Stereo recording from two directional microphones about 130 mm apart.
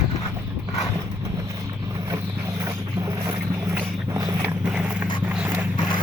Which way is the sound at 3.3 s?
25° right (ahead or behind).